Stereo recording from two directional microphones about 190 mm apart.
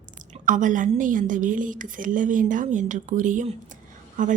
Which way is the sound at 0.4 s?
45° right (ahead or behind).